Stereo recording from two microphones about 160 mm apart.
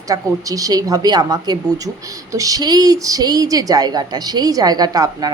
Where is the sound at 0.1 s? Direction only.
20° right (ahead or behind).